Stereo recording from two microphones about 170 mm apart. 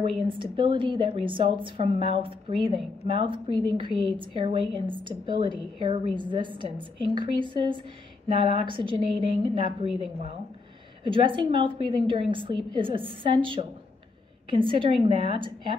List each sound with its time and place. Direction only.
0.3 s a woman's voice: 30° right (ahead or behind)
11.1 s a woman's voice: 30° right (ahead or behind)